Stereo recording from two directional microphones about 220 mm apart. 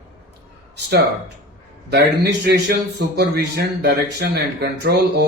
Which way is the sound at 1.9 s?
50° right (ahead or behind).